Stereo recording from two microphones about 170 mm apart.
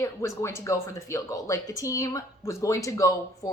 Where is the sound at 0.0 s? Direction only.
15° left (ahead or behind).